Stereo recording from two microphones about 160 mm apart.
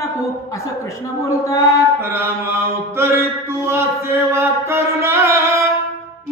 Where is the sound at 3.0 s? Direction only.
15° right (ahead or behind).